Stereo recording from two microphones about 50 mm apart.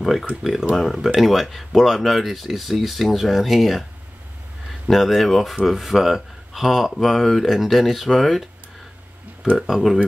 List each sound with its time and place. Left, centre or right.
0.0 s speech: centre
4.8 s speech: centre
9.7 s speech: centre